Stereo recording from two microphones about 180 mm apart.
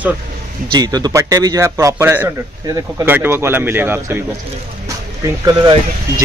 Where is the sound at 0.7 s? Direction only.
20° right (ahead or behind).